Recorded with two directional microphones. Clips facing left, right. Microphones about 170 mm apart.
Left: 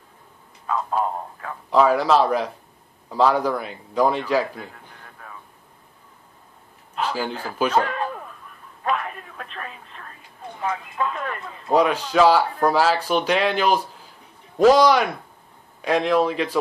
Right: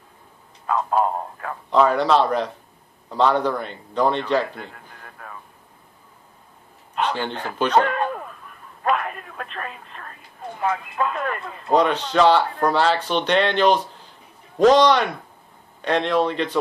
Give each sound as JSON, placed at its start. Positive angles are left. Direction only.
{"t": 0.7, "sound": "speech", "side_deg": -55}
{"t": 1.7, "sound": "a man's voice", "side_deg": 5}
{"t": 7.2, "sound": "speech", "side_deg": 5}
{"t": 7.8, "sound": "speech", "side_deg": -60}
{"t": 8.8, "sound": "telephone", "side_deg": -60}
{"t": 10.6, "sound": "speech", "side_deg": -60}
{"t": 11.7, "sound": "a man's voice", "side_deg": 5}